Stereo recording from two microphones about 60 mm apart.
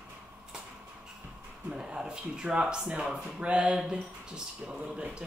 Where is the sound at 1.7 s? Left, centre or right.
Centre.